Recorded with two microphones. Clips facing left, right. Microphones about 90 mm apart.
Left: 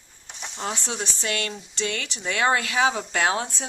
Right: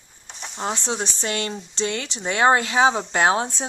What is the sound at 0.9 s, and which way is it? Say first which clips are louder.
Speech: right 3 dB; 30° right (ahead or behind).